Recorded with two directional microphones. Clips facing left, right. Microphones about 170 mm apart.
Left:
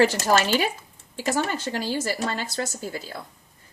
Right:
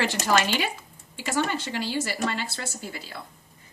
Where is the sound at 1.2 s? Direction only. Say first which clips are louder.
Left 1 dB; 40° left (ahead or behind).